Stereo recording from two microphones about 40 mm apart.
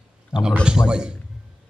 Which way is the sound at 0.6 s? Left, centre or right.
Right.